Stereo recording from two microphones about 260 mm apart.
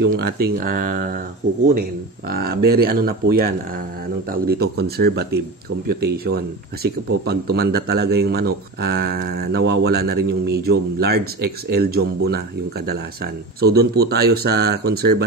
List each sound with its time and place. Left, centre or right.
0.0 s speech: right
2.3 s speech: right
13.6 s speech: right